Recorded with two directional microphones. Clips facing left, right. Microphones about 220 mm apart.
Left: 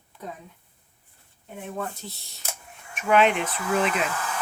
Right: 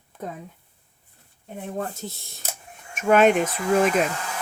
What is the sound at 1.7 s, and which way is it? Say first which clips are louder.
Speech: right 3 dB; 50° right (ahead or behind).